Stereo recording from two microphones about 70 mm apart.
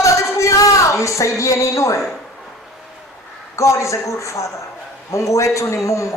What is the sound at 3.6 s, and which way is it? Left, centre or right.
A man's voice, left.